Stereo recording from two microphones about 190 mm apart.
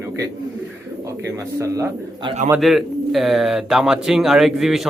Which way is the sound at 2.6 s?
Centre (ahead or behind).